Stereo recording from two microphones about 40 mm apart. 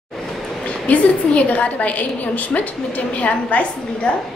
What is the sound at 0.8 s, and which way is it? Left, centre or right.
A woman's voice, left.